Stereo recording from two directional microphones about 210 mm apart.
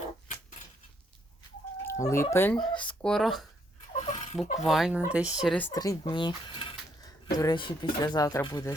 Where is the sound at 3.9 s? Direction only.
35° left (ahead or behind).